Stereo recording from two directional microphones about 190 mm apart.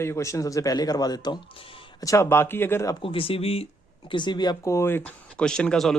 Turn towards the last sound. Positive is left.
turn(degrees=5)  # may be behind; listen again after turning